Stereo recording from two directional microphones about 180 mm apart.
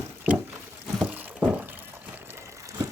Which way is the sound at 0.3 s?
10° right (ahead or behind).